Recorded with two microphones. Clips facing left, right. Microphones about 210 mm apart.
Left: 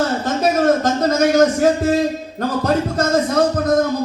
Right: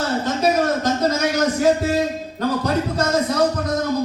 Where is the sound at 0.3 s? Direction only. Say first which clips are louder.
Left 3 dB; 50° left (ahead or behind).